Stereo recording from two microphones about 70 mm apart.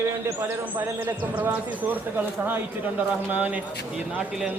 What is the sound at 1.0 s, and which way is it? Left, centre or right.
Speech, right.